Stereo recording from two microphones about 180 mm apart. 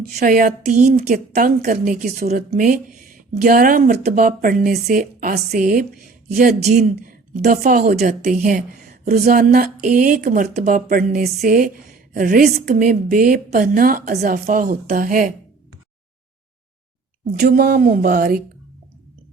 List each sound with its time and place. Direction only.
0.0 s speech: 55° right (ahead or behind)
17.4 s speech: 60° right (ahead or behind)